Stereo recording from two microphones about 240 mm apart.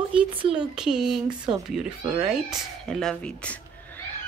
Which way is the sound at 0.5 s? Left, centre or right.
Centre.